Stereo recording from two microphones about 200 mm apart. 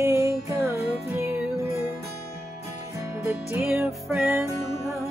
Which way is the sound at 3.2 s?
15° right (ahead or behind).